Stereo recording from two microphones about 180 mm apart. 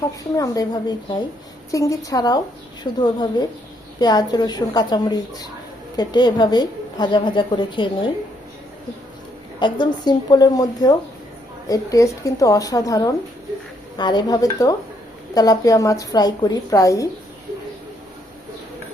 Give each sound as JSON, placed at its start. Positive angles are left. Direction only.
{"t": 0.3, "sound": "a woman's voice", "side_deg": 20}
{"t": 9.6, "sound": "a woman's voice", "side_deg": 25}